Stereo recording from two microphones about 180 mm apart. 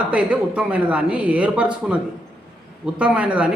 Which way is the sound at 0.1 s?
5° right (ahead or behind).